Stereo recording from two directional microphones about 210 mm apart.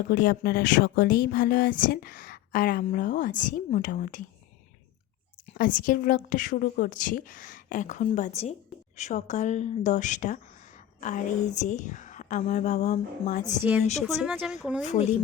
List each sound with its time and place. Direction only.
0.1 s speech: 45° left (ahead or behind)
5.5 s a woman's voice: 40° left (ahead or behind)
13.7 s speech: 5° right (ahead or behind)